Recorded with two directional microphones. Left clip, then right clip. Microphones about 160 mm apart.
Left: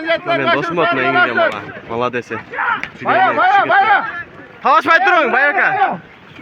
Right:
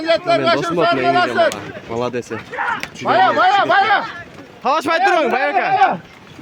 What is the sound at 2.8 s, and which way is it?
Speech, 90° right.